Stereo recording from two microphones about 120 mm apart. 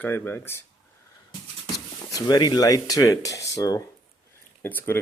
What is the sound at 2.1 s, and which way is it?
Speech, 35° left (ahead or behind).